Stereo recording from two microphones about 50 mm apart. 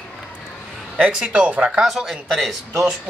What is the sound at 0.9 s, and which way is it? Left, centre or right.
Speech, centre.